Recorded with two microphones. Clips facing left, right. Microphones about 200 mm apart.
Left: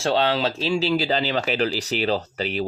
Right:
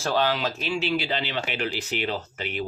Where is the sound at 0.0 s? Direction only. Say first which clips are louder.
Left 3 dB; 25° left (ahead or behind).